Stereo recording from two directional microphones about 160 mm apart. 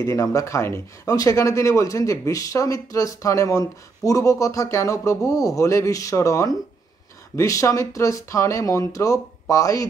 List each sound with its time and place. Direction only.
0.0 s speech: 20° left (ahead or behind)